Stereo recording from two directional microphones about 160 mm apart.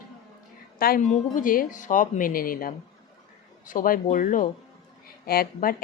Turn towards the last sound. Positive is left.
turn(degrees=65)  # may be behind; listen again after turning